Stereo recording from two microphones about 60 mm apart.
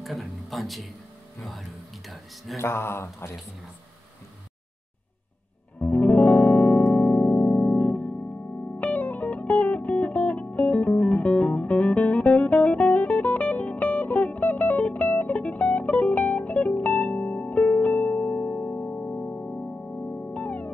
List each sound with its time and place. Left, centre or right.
0.0 s a man's voice: centre
2.5 s mantra: left
5.8 s music: left